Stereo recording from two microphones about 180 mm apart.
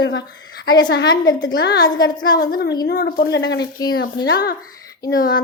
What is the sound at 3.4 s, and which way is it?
Speech, 70° left (ahead or behind).